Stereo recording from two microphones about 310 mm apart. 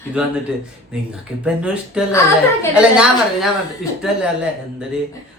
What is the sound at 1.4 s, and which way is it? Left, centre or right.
A woman's voice, centre.